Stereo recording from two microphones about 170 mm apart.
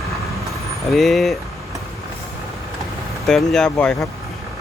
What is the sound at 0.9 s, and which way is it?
Speech, centre (ahead or behind).